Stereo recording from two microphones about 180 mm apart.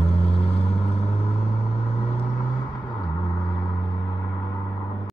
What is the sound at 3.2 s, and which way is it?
Gong, 15° left (ahead or behind).